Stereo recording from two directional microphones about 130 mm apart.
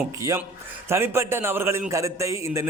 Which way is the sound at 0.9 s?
20° right (ahead or behind).